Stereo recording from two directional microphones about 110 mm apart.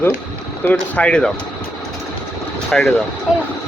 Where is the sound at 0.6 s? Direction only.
15° left (ahead or behind).